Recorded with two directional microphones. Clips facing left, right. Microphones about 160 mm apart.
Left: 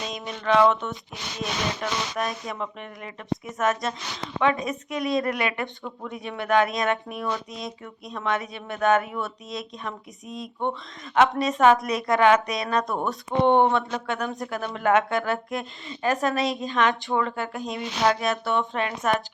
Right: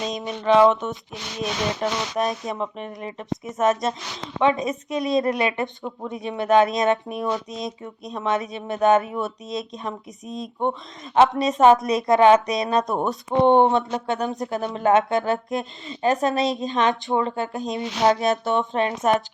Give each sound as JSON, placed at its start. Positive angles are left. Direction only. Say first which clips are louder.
{"t": 0.1, "sound": "a woman's voice", "louder": "right 4 dB", "side_deg": -20}